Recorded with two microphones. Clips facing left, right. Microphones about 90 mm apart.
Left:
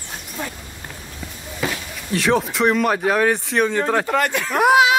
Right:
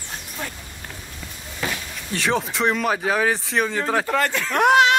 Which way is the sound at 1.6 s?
Centre (ahead or behind).